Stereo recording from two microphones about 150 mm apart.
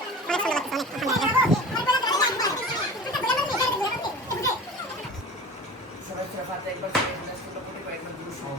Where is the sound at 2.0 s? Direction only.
25° left (ahead or behind).